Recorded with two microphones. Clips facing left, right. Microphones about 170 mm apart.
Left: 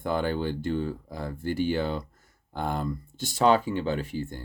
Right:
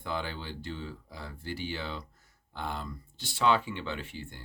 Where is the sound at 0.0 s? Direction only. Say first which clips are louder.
Left 9 dB; 50° left (ahead or behind).